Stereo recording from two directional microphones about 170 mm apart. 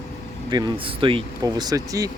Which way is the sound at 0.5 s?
25° right (ahead or behind).